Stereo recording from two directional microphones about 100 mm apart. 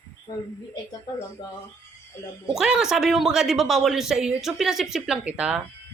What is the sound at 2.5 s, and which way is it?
Speech, 5° right (ahead or behind).